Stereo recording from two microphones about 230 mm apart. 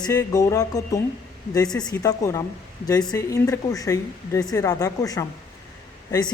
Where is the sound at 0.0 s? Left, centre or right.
Centre.